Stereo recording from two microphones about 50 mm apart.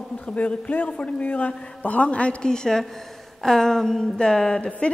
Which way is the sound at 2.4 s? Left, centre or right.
Centre.